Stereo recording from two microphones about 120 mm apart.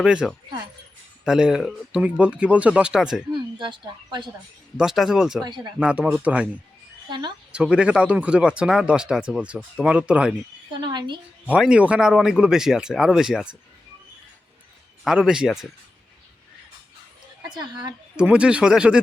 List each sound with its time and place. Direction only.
0.0 s speech: 5° right (ahead or behind)
3.3 s speech: 40° right (ahead or behind)
4.8 s speech: 5° right (ahead or behind)
7.1 s speech: 35° right (ahead or behind)
7.5 s speech: 10° right (ahead or behind)
10.8 s speech: 40° right (ahead or behind)
11.4 s speech: 10° right (ahead or behind)
15.0 s speech: 5° right (ahead or behind)
17.5 s speech: 35° right (ahead or behind)
18.2 s speech: 10° right (ahead or behind)